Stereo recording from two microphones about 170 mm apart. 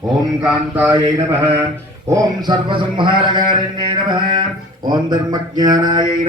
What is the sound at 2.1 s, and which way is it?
A man's voice, 25° right (ahead or behind).